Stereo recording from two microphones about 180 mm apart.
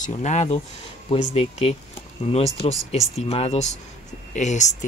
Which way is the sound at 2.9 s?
35° left (ahead or behind).